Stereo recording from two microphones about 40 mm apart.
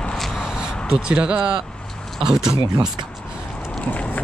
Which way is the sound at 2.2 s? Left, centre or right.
Centre.